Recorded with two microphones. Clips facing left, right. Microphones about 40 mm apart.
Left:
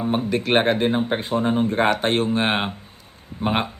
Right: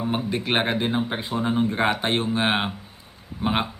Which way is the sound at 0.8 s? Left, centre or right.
Centre.